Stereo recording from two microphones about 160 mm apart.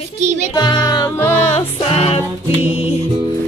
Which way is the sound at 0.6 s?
25° left (ahead or behind).